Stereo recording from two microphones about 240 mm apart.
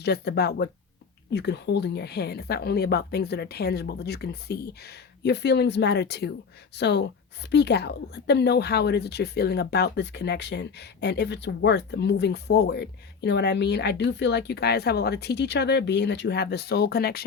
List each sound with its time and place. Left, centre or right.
0.0 s a woman's voice: left